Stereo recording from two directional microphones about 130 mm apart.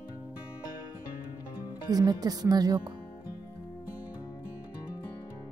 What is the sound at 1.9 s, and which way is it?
Speech, 30° right (ahead or behind).